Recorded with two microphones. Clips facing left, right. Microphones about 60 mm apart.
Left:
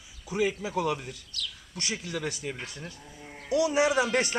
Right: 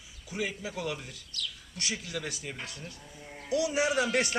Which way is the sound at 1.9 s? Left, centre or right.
Left.